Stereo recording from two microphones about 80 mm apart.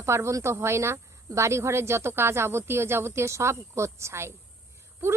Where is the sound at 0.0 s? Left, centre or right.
Right.